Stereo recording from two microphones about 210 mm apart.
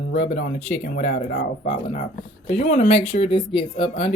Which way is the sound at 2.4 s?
30° left (ahead or behind).